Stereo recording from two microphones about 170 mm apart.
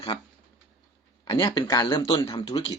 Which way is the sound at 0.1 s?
25° left (ahead or behind).